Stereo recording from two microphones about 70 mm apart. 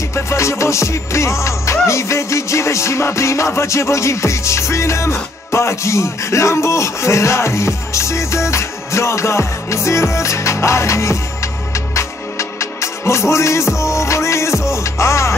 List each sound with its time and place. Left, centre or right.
0.1 s music: left